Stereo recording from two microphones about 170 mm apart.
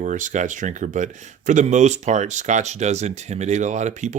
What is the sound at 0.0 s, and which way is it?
Speech, 50° right (ahead or behind).